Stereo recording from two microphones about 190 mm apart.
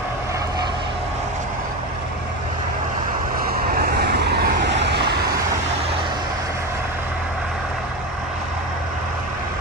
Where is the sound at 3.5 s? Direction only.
50° right (ahead or behind).